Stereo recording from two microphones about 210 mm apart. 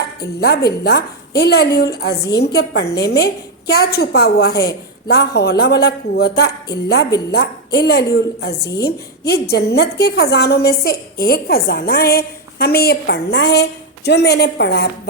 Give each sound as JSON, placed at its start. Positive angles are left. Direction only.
{"t": 0.3, "sound": "a woman's voice", "side_deg": 50}